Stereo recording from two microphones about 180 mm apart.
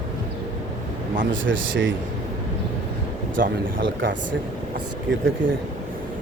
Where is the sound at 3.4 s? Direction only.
60° right (ahead or behind).